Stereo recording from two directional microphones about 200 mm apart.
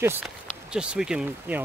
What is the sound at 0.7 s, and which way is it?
Speech, 5° right (ahead or behind).